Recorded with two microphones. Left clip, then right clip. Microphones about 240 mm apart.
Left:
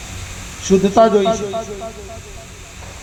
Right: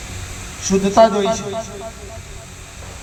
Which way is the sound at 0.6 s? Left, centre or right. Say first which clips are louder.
Left 1 dB; right.